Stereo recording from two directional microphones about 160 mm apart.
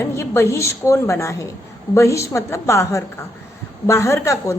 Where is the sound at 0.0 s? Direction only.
15° left (ahead or behind).